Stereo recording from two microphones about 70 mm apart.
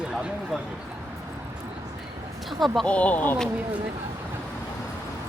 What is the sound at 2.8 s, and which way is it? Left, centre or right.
Speech, centre.